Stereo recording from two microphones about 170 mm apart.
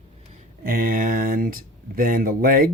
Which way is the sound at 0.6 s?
55° right (ahead or behind).